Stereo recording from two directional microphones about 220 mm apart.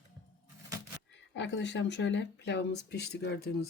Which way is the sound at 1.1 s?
55° left (ahead or behind).